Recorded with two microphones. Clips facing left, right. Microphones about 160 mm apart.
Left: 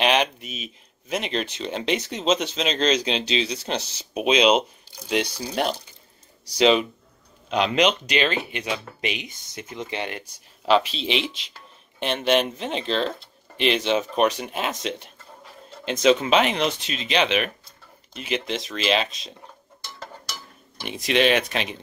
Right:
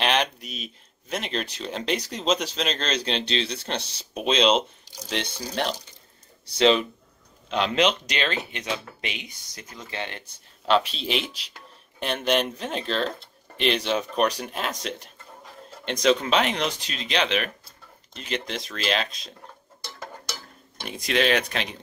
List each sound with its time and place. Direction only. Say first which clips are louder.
0.0 s speech: left 3 dB; 5° left (ahead or behind)
10.6 s speech: left 2 dB; centre (ahead or behind)
20.8 s speech: left 3 dB; centre (ahead or behind)